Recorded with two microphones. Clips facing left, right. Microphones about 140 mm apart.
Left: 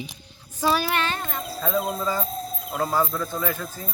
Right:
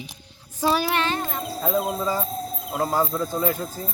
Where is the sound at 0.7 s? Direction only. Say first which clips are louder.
Right 2 dB; 25° right (ahead or behind).